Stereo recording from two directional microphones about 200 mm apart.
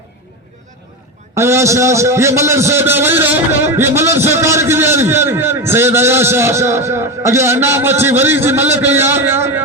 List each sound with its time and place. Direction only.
1.4 s a man's voice: 15° right (ahead or behind)